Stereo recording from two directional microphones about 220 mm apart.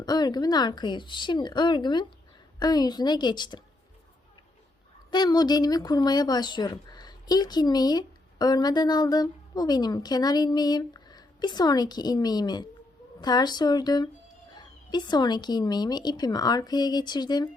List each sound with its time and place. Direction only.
0.0 s speech: 20° left (ahead or behind)
5.1 s speech: 20° left (ahead or behind)